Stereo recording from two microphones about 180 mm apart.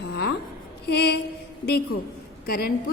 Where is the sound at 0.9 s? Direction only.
65° left (ahead or behind).